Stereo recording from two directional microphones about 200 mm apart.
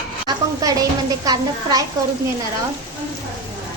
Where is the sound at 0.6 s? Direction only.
20° right (ahead or behind).